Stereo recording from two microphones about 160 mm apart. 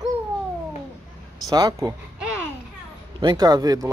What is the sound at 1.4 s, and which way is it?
Speech, 25° right (ahead or behind).